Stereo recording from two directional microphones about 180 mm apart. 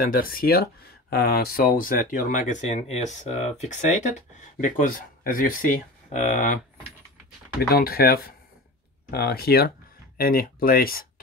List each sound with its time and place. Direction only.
0.0 s speech: 55° left (ahead or behind)
7.7 s speech: 55° left (ahead or behind)